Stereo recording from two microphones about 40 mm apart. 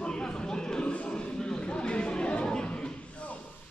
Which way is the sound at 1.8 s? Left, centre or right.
Left.